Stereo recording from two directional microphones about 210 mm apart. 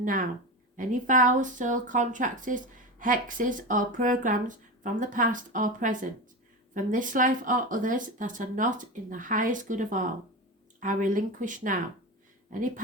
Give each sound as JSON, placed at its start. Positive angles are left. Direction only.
{"t": 0.0, "sound": "speech", "side_deg": -40}